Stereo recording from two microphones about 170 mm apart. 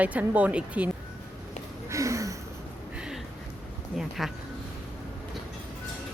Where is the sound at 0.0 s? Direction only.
10° right (ahead or behind).